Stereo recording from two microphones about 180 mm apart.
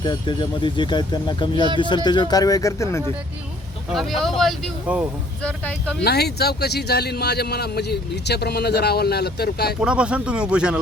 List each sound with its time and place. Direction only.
0.0 s speech: 25° left (ahead or behind)
3.9 s speech: centre (ahead or behind)
6.0 s a man's voice: 65° left (ahead or behind)
9.8 s speech: 5° right (ahead or behind)